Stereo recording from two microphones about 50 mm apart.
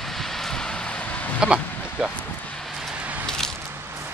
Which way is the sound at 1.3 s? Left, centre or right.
Centre.